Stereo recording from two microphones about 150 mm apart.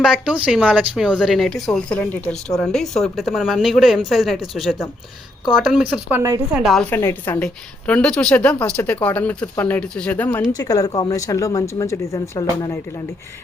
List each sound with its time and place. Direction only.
0.0 s speech: 5° right (ahead or behind)
6.5 s speech: centre (ahead or behind)
6.9 s a woman's voice: 15° left (ahead or behind)
10.5 s speech: 25° left (ahead or behind)